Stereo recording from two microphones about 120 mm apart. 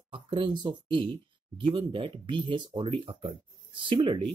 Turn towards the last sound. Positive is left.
turn(degrees=-45)  # may be behind; listen again after turning